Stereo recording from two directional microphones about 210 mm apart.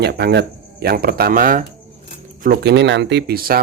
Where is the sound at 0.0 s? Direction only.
50° right (ahead or behind).